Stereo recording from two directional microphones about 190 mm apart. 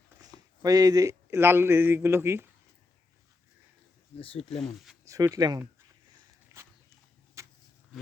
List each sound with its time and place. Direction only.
0.2 s speech: 20° right (ahead or behind)
4.2 s speech: 30° left (ahead or behind)
4.5 s speech: centre (ahead or behind)
5.0 s speech: 15° right (ahead or behind)
6.5 s walk: 15° right (ahead or behind)
7.4 s a sound: 15° right (ahead or behind)